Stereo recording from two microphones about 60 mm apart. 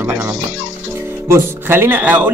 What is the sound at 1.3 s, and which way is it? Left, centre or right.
Speech, right.